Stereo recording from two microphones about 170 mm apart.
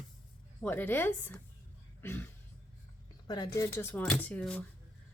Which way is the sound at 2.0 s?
15° left (ahead or behind).